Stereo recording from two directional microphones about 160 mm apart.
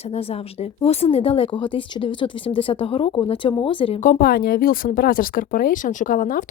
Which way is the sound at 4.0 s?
60° left (ahead or behind).